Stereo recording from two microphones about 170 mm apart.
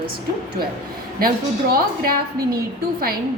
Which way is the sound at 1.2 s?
60° right (ahead or behind).